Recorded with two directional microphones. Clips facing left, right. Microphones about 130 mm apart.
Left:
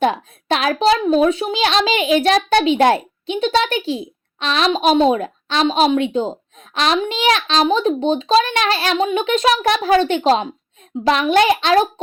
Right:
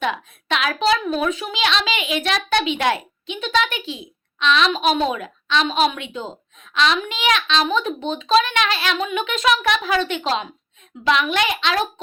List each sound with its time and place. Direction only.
0.0 s a woman's voice: 35° left (ahead or behind)